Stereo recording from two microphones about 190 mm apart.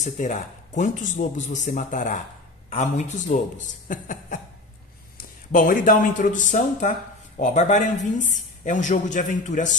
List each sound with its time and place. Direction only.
0.0 s a woman's voice: 40° left (ahead or behind)